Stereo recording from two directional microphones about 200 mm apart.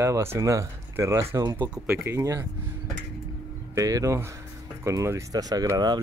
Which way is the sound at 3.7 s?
15° right (ahead or behind).